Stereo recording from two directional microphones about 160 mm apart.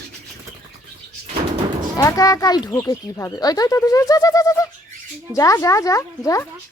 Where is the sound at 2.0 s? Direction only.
20° left (ahead or behind).